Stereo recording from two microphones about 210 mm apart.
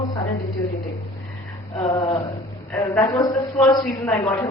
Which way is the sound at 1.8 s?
20° left (ahead or behind).